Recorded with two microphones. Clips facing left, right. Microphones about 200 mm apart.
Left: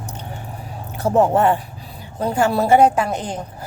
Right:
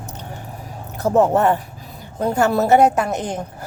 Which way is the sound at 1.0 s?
40° right (ahead or behind).